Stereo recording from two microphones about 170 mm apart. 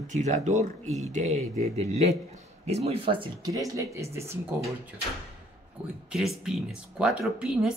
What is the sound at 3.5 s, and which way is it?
Speech, 20° right (ahead or behind).